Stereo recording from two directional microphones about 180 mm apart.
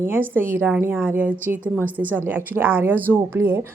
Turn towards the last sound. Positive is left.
turn(degrees=-10)  # may be behind; listen again after turning